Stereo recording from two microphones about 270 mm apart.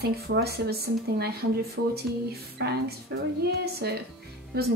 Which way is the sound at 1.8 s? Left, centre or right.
Right.